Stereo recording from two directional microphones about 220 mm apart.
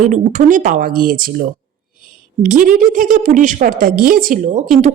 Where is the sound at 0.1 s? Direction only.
35° right (ahead or behind).